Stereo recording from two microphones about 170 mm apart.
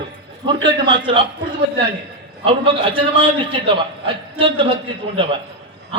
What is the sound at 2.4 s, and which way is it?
A man's voice, 30° right (ahead or behind).